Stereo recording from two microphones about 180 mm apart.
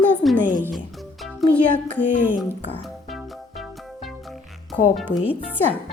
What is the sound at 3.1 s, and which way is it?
Music, centre (ahead or behind).